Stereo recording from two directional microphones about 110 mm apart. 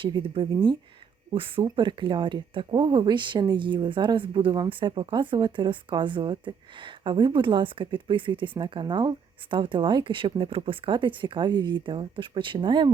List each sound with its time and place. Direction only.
0.0 s speech: 50° right (ahead or behind)